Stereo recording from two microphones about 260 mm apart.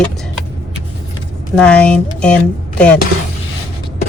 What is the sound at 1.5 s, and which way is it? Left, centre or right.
Speech, centre.